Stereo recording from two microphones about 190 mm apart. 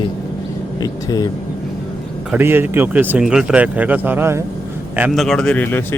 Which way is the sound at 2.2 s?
10° right (ahead or behind).